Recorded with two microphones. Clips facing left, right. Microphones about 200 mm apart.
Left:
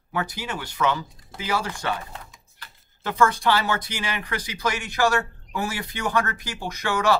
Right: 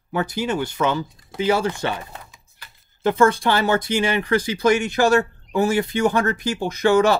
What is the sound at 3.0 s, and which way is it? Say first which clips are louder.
Speech: right 5 dB; 25° right (ahead or behind).